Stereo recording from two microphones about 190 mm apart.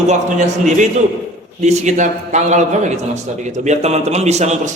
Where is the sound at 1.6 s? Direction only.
35° right (ahead or behind).